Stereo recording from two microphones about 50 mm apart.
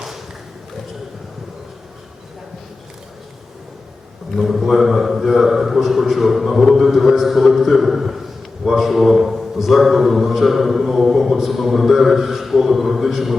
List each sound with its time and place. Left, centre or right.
4.4 s a man's voice: centre